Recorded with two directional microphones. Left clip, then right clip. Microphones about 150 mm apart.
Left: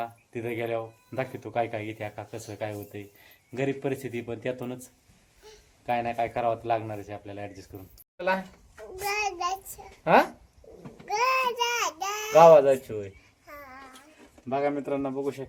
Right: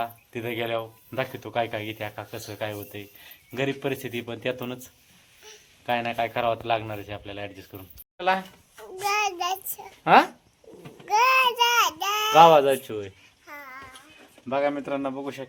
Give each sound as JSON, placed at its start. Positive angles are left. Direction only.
{"t": 0.0, "sound": "speech", "side_deg": -5}
{"t": 9.0, "sound": "child singing", "side_deg": 0}
{"t": 11.0, "sound": "a sound", "side_deg": 0}
{"t": 13.5, "sound": "child singing", "side_deg": 10}
{"t": 14.5, "sound": "speech", "side_deg": -15}